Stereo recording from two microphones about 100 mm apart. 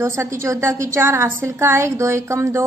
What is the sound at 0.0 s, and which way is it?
A woman's voice, 30° right (ahead or behind).